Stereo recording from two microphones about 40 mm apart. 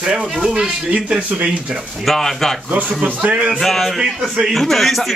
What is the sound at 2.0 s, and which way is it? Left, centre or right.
Speech, centre.